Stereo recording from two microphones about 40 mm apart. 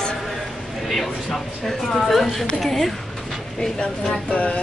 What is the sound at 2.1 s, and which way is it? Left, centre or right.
Speech, centre.